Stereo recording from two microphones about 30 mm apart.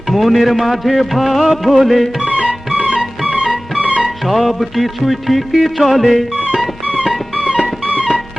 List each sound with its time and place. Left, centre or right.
0.1 s music: centre
2.2 s music: right
4.3 s music: centre